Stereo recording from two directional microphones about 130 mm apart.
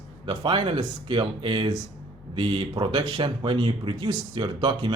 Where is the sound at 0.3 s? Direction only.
40° right (ahead or behind).